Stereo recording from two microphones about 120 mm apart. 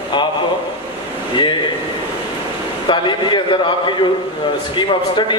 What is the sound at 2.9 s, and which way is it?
A man's voice, 40° left (ahead or behind).